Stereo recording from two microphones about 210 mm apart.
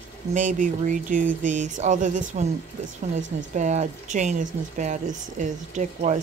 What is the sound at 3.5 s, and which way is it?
Speech, 35° right (ahead or behind).